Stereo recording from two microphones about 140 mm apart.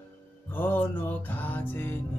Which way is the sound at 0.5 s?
15° left (ahead or behind).